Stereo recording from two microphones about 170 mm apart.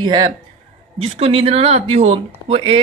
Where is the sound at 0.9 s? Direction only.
35° right (ahead or behind).